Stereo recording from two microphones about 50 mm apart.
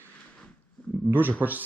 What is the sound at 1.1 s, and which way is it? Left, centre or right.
Speech, right.